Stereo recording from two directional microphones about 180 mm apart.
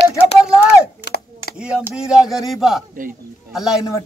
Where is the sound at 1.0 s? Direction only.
60° left (ahead or behind).